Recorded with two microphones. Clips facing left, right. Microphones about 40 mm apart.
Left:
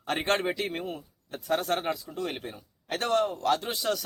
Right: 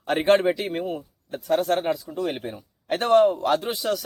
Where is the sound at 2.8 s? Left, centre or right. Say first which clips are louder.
Right 9 dB; right.